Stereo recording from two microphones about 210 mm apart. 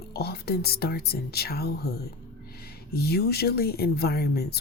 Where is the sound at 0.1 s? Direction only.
50° left (ahead or behind).